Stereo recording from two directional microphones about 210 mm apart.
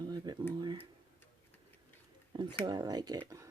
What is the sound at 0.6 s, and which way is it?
Tick-tock, 20° right (ahead or behind).